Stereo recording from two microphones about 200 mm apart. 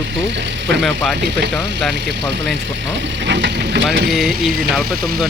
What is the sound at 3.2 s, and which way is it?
Speech, 60° right (ahead or behind).